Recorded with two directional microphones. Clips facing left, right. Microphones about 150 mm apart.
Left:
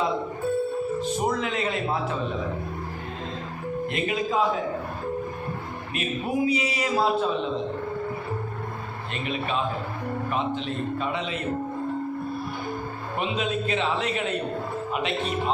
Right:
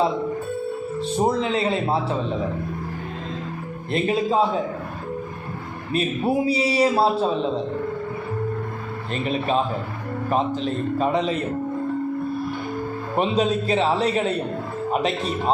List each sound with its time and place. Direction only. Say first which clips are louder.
1.2 s a man's voice: right 9 dB; 30° right (ahead or behind)
3.9 s a man's voice: right 6 dB; 30° right (ahead or behind)
5.9 s a man's voice: right 6 dB; 35° right (ahead or behind)
9.1 s a man's voice: right 6 dB; 35° right (ahead or behind)
13.1 s a man's voice: right 7 dB; 35° right (ahead or behind)